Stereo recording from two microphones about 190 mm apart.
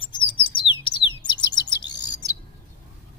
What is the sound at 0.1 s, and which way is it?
Bird, 25° left (ahead or behind).